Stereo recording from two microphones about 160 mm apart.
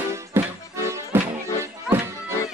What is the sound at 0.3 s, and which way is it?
Accordion, 15° right (ahead or behind).